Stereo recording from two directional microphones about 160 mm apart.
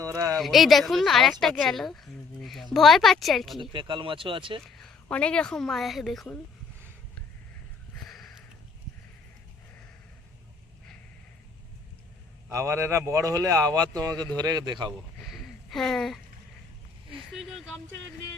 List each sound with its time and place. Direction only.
0.0 s a sound: 20° right (ahead or behind)
0.3 s speech: centre (ahead or behind)
3.6 s speech: 30° right (ahead or behind)
4.6 s speech: 5° left (ahead or behind)
8.0 s sniff: centre (ahead or behind)
12.5 s speech: 15° right (ahead or behind)
15.2 s a sound: centre (ahead or behind)
17.3 s speech: centre (ahead or behind)